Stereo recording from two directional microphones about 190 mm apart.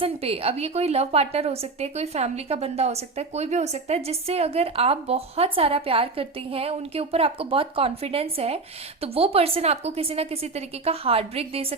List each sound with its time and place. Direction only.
0.0 s a woman's voice: 30° right (ahead or behind)